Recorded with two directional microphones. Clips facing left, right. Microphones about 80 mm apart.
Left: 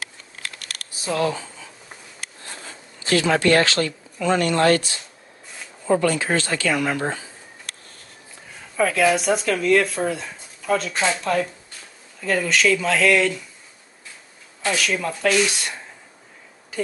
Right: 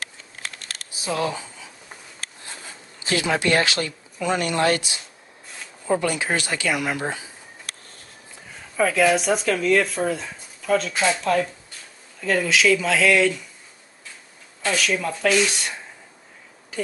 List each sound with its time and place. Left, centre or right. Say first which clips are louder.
0.4 s crumpling: even; right
2.4 s speech: left 1 dB; centre
8.7 s speech: even; centre
14.8 s speech: right 2 dB; centre